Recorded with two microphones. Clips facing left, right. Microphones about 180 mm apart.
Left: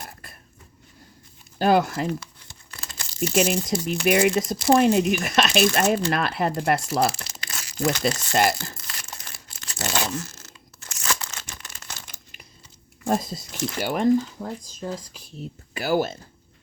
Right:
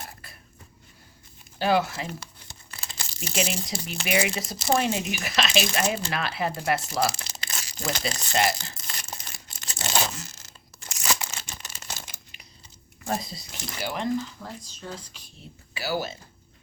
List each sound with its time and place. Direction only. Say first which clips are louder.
1.5 s speech: left 4 dB; 50° left (ahead or behind)
3.2 s speech: left 8 dB; 50° left (ahead or behind)
7.3 s crumpling: left 7 dB; 30° right (ahead or behind)
8.3 s speech: left 1 dB; 50° left (ahead or behind)
8.8 s crumpling: even; 20° right (ahead or behind)
9.6 s tearing: left 2 dB; 20° right (ahead or behind)
11.4 s a sound: right 1 dB; 20° right (ahead or behind)
13.1 s speech: left 6 dB; 50° left (ahead or behind)